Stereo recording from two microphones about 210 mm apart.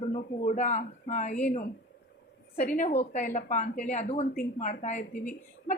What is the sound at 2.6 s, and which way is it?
A woman's voice, 40° left (ahead or behind).